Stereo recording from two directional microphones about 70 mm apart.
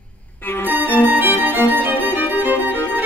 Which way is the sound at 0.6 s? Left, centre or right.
Right.